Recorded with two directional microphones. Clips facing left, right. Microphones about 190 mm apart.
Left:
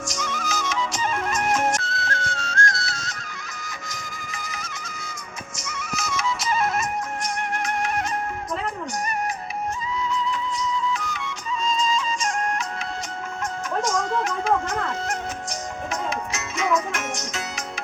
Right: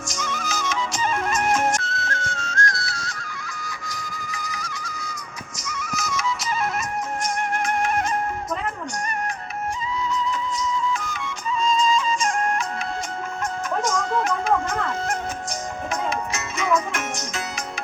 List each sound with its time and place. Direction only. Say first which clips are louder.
0.1 s music: right 1 dB; 50° right (ahead or behind)
1.8 s music: even; 35° left (ahead or behind)
7.2 s music: right 2 dB; 50° right (ahead or behind)
10.1 s music: right 1 dB; 45° right (ahead or behind)
13.8 s music: right 1 dB; 55° right (ahead or behind)